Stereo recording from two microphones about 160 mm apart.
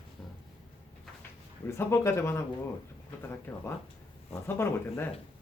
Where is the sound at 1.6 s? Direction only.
15° left (ahead or behind).